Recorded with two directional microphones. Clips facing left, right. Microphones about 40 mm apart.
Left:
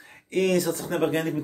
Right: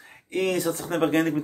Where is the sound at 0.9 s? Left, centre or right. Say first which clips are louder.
Right 3 dB; right.